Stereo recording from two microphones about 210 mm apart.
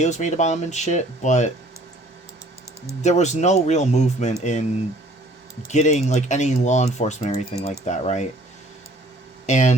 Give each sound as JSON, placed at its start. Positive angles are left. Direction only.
{"t": 0.0, "sound": "speech", "side_deg": 35}
{"t": 3.0, "sound": "speech", "side_deg": 35}
{"t": 5.6, "sound": "speech", "side_deg": 35}
{"t": 9.5, "sound": "speech", "side_deg": 35}